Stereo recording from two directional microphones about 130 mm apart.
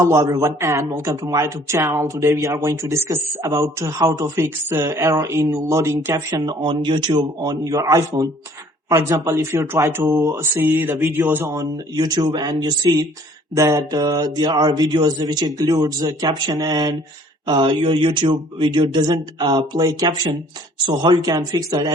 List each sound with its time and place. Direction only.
0.0 s speech: 20° right (ahead or behind)
11.4 s speech: 30° right (ahead or behind)